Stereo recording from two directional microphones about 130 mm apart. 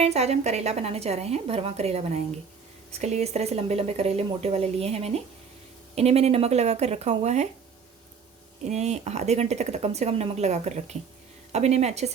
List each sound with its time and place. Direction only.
0.0 s a woman's voice: 55° right (ahead or behind)
8.6 s speech: 60° right (ahead or behind)